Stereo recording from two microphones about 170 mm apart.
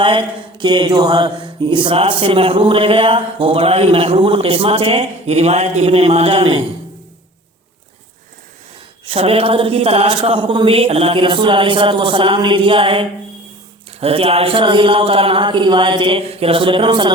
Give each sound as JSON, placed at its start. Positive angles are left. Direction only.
{"t": 0.0, "sound": "mantra", "side_deg": -30}
{"t": 9.0, "sound": "mantra", "side_deg": -35}